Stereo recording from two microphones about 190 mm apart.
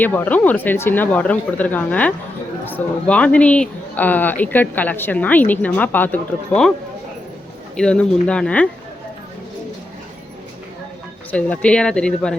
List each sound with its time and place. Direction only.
0.0 s speech: 10° left (ahead or behind)
7.8 s speech: 5° left (ahead or behind)
11.3 s speech: 5° left (ahead or behind)